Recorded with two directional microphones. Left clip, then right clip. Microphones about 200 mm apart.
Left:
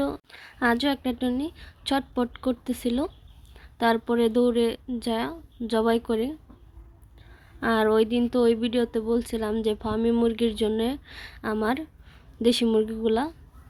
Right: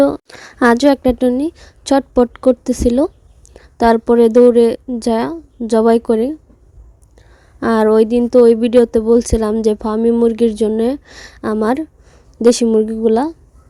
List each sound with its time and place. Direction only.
0.0 s a woman's voice: 55° right (ahead or behind)